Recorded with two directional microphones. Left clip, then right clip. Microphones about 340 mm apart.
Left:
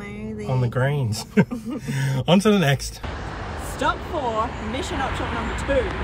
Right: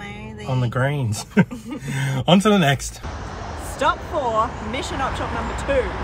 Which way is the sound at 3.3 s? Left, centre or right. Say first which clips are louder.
Even; right.